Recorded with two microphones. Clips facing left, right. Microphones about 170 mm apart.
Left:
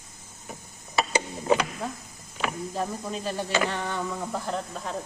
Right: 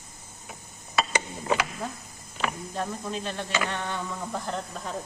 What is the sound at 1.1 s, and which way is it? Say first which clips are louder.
Mechanisms: left 4 dB; 30° left (ahead or behind).